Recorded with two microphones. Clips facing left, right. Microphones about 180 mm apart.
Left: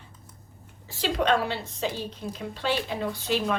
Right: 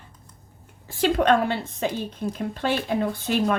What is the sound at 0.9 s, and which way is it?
A woman's voice, 55° right (ahead or behind).